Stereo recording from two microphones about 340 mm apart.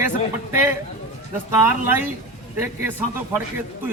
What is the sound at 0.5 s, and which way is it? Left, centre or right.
A man's voice, centre.